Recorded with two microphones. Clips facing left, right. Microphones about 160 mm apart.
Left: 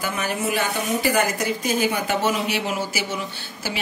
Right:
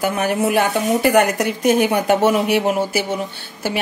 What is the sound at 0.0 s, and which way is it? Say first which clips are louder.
Speech: right 7 dB; 60° right (ahead or behind).